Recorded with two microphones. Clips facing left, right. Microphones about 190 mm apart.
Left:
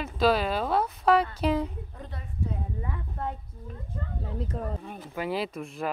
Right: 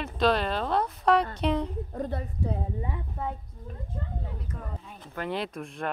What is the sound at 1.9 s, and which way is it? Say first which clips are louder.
Speech: right 10 dB; 45° right (ahead or behind).